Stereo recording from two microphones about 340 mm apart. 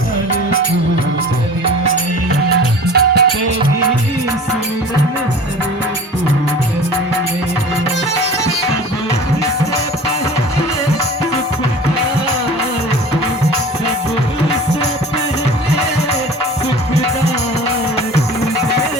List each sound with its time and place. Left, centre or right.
2.5 s music: right